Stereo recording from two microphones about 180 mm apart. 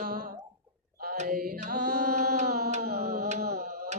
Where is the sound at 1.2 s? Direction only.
50° right (ahead or behind).